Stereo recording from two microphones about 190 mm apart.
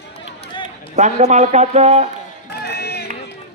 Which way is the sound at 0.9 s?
35° right (ahead or behind).